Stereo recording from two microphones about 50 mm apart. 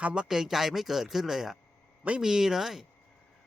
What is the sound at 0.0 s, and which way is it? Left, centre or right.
Speech, right.